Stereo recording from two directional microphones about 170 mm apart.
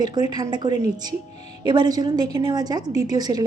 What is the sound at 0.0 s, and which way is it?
Speech, 25° right (ahead or behind).